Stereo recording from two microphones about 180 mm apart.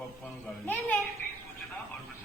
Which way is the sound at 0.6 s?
10° left (ahead or behind).